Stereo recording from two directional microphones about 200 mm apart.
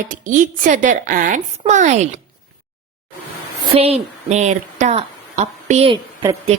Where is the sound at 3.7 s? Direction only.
30° right (ahead or behind).